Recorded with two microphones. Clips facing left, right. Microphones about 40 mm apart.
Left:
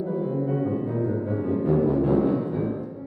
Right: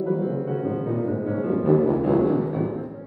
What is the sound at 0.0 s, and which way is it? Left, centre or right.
Music, centre.